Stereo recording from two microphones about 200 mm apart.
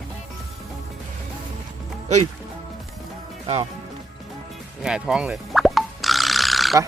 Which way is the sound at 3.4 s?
30° right (ahead or behind).